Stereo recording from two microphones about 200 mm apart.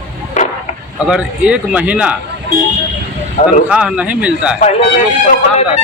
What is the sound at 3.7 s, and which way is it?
Speech, 5° right (ahead or behind).